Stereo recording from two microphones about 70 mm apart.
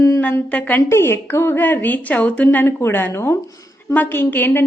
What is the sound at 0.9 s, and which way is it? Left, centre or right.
Speech, left.